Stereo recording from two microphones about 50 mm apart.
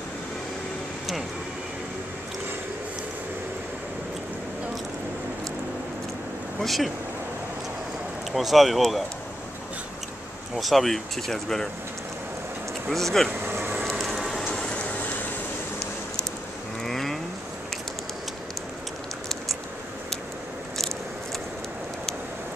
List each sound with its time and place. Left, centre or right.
6.6 s speech: centre
8.3 s speech: centre
10.5 s speech: centre
12.9 s speech: centre
13.5 s a sound: right
13.8 s a sound: centre
14.5 s train: left
16.8 s mechanisms: centre